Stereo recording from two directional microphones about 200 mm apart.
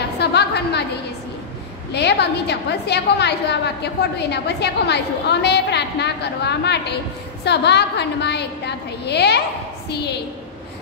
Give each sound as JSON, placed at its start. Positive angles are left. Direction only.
{"t": 0.2, "sound": "a woman's voice", "side_deg": 55}
{"t": 1.9, "sound": "a woman's voice", "side_deg": 55}